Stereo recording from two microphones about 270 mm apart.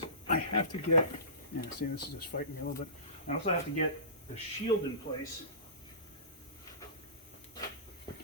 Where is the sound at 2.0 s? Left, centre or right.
Left.